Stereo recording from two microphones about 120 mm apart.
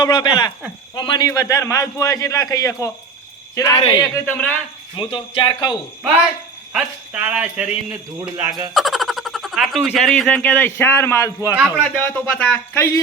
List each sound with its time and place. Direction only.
0.0 s speech: 35° left (ahead or behind)
1.3 s a man's voice: 25° left (ahead or behind)
4.3 s a man's voice: 10° left (ahead or behind)
4.9 s speech: 45° left (ahead or behind)
6.7 s speech: 10° right (ahead or behind); by 11.5 s 25° left (ahead or behind)
11.8 s a man's voice: 10° left (ahead or behind)